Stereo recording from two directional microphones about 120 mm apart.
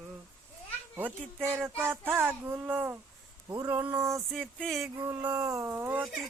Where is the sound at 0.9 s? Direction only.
15° right (ahead or behind).